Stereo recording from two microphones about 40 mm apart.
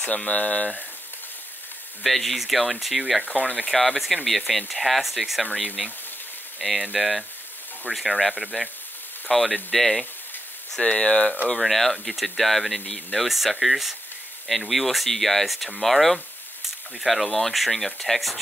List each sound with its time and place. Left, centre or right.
0.1 s speech: left
2.0 s speech: centre
5.4 s speech: centre
6.9 s speech: centre
10.8 s speech: left
11.6 s speech: centre